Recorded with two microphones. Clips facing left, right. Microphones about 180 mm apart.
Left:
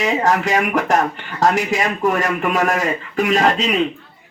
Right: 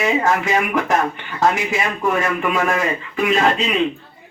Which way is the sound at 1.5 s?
40° left (ahead or behind).